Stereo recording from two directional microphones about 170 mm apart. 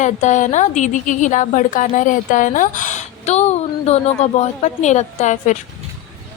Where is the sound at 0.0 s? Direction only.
45° left (ahead or behind).